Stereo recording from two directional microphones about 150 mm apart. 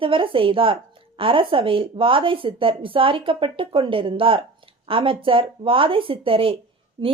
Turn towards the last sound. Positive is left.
turn(degrees=-25)  # may be behind; listen again after turning